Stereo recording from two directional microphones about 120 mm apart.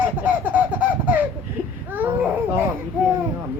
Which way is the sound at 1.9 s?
15° right (ahead or behind).